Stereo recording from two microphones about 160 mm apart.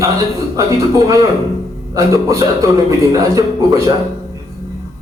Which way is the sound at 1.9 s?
20° right (ahead or behind).